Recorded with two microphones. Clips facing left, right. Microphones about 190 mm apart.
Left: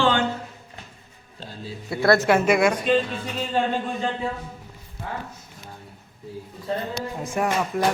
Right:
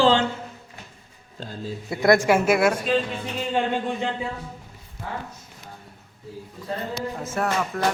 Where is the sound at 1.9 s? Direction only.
20° right (ahead or behind).